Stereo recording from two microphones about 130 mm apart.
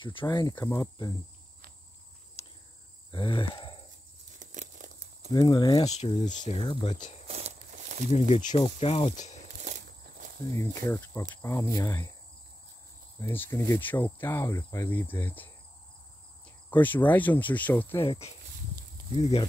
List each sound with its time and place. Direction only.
0.0 s speech: 40° left (ahead or behind)
3.1 s speech: 40° left (ahead or behind)
4.3 s tearing: 70° right (ahead or behind)
5.3 s speech: 30° left (ahead or behind)
5.9 s speech: 55° left (ahead or behind)
6.7 s speech: 45° left (ahead or behind)
7.2 s a sound: 55° right (ahead or behind)
8.2 s speech: 65° left (ahead or behind)
8.5 s speech: 45° left (ahead or behind)
9.6 s walk: 70° right (ahead or behind)
10.5 s speech: 20° left (ahead or behind)
13.3 s cricket: 15° left (ahead or behind)
16.7 s cricket: 15° left (ahead or behind)
18.0 s speech: 45° left (ahead or behind)